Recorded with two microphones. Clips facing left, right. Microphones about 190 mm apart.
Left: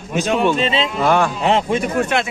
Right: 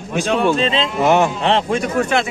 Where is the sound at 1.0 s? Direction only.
20° right (ahead or behind).